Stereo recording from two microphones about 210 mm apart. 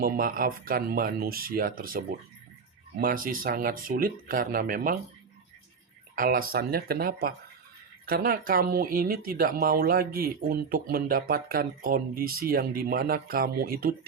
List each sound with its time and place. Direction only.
0.0 s speech: 45° right (ahead or behind)
6.1 s speech: 45° right (ahead or behind)